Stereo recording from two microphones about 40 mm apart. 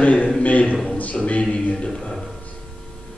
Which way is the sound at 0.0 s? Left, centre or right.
Left.